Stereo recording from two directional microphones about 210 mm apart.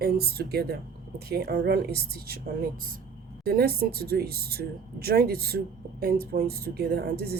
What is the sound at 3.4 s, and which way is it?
Speech, 45° right (ahead or behind).